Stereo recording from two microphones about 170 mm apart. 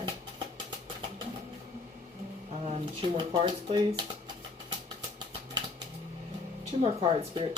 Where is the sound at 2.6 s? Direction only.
35° right (ahead or behind).